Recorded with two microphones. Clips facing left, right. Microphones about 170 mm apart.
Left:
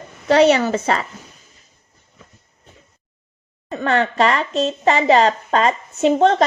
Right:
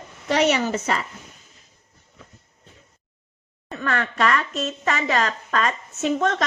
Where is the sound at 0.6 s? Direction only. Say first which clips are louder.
Left 5 dB; 85° left.